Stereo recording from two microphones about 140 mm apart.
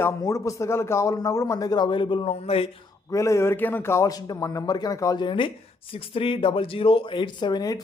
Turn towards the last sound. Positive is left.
turn(degrees=30)  # may be behind; listen again after turning